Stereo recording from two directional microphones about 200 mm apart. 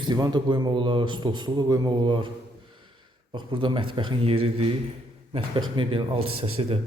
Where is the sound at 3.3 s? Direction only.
25° right (ahead or behind).